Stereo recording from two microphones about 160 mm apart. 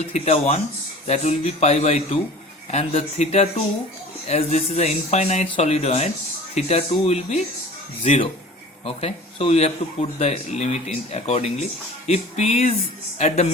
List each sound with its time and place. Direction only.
0.1 s speech: 40° left (ahead or behind)
8.8 s speech: 40° left (ahead or behind)